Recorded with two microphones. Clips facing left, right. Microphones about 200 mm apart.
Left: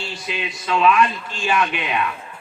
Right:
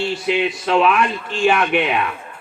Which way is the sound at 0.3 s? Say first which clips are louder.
Right 6 dB; 60° right (ahead or behind).